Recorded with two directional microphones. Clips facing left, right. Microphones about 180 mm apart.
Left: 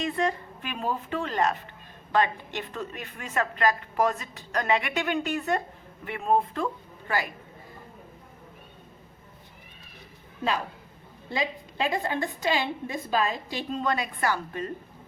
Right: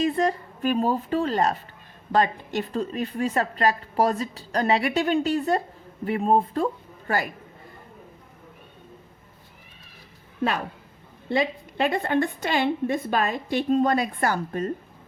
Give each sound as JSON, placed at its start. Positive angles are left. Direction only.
{"t": 0.2, "sound": "a woman's voice", "side_deg": -40}
{"t": 11.3, "sound": "a woman's voice", "side_deg": -60}